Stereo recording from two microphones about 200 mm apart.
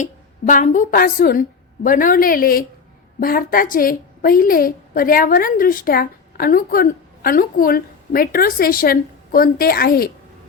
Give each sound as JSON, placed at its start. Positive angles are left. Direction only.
{"t": 0.0, "sound": "a woman's voice", "side_deg": 40}